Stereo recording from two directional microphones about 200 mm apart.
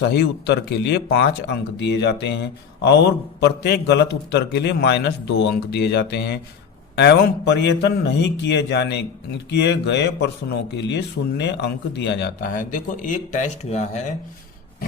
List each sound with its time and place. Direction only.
0.0 s speech: 55° left (ahead or behind)
3.4 s speech: 55° left (ahead or behind); by 14.0 s 35° left (ahead or behind)